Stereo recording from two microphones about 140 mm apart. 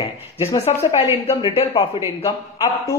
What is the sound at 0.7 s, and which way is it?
Speech, 45° left (ahead or behind).